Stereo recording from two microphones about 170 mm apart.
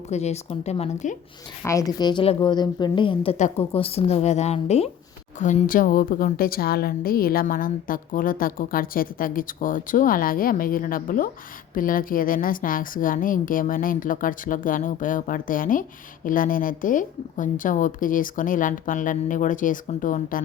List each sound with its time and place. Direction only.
0.1 s speech: 40° left (ahead or behind)
1.6 s a woman's voice: 20° left (ahead or behind); by 20.4 s 50° left (ahead or behind)